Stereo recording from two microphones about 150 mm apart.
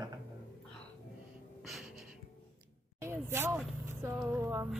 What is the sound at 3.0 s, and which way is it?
Speech, 15° right (ahead or behind).